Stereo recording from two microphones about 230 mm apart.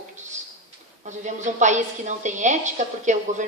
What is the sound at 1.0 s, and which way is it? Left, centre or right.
A woman's voice, right.